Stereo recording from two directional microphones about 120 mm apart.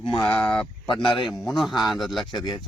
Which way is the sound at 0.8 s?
45° left (ahead or behind).